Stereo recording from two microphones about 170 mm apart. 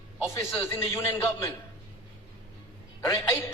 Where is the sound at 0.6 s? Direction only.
15° left (ahead or behind).